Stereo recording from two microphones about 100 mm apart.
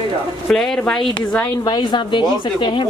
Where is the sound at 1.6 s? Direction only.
50° left (ahead or behind).